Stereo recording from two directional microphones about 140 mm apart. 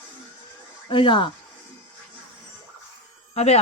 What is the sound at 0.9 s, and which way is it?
Speech, 35° left (ahead or behind).